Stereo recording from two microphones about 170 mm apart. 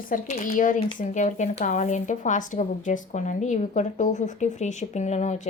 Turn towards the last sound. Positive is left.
turn(degrees=40)  # may be behind; listen again after turning